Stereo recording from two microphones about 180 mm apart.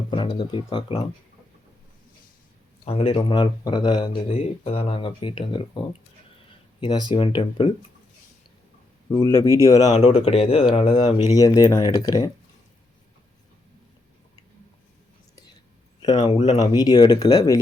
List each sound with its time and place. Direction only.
0.1 s speech: 25° left (ahead or behind)
2.8 s speech: 30° left (ahead or behind)
9.2 s speech: 15° left (ahead or behind)
9.9 s speech: 40° left (ahead or behind); by 12.3 s 20° left (ahead or behind)
16.0 s speech: 25° left (ahead or behind)
16.6 s speech: 20° left (ahead or behind)